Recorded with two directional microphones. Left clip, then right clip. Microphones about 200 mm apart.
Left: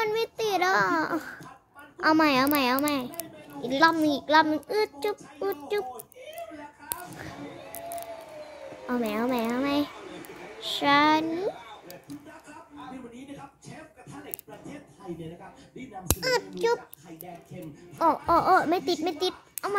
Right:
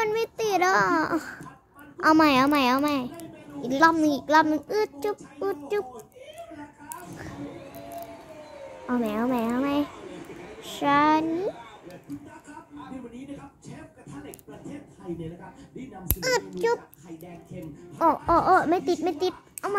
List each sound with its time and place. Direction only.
0.0 s a sound: 5° left (ahead or behind)
2.0 s a child's voice: centre (ahead or behind)
8.8 s a child's voice: 15° left (ahead or behind)
16.2 s a child's voice: centre (ahead or behind)
17.9 s a child's voice: 10° left (ahead or behind)